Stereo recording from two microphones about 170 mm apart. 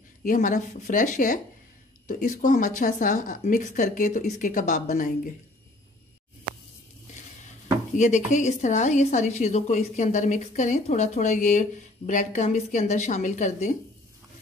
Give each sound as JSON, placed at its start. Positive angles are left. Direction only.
{"t": 0.2, "sound": "speech", "side_deg": 50}
{"t": 7.9, "sound": "speech", "side_deg": 45}